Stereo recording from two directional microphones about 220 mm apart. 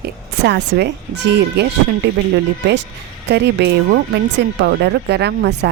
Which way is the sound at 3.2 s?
50° right (ahead or behind).